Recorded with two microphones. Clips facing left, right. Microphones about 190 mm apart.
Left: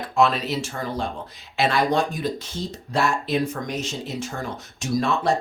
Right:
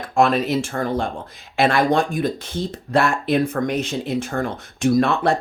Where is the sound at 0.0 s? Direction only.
50° right (ahead or behind).